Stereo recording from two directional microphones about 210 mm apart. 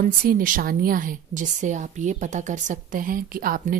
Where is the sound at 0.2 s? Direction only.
40° right (ahead or behind).